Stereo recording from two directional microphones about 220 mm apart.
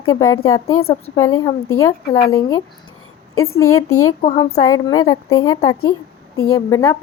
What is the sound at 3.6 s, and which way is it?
Speech, 80° left.